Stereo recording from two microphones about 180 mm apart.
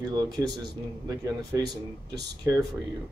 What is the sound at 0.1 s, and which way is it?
Speech, 20° right (ahead or behind).